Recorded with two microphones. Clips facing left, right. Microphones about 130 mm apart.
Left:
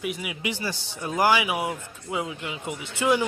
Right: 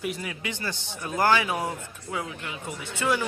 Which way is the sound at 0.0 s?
5° left (ahead or behind).